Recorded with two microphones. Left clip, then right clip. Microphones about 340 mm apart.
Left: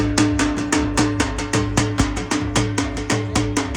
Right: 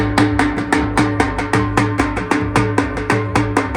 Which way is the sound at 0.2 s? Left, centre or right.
Centre.